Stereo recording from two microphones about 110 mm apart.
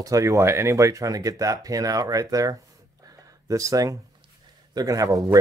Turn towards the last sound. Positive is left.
turn(degrees=-30)  # may be behind; listen again after turning